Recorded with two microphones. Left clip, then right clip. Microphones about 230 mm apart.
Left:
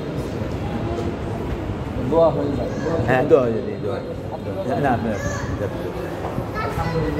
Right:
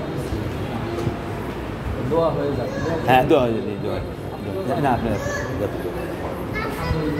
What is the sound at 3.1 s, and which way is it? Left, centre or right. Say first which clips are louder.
Speech: right 1 dB; right.